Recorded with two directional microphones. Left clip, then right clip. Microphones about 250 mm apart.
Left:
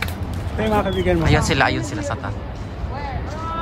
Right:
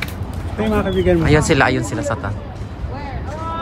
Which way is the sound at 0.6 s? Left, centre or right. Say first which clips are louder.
Even; left.